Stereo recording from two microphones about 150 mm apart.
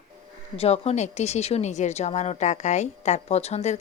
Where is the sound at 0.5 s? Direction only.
40° left (ahead or behind).